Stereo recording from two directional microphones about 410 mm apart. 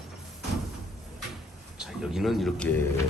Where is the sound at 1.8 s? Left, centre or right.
Centre.